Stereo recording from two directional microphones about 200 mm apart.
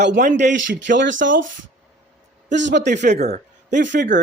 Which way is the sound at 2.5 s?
65° right (ahead or behind).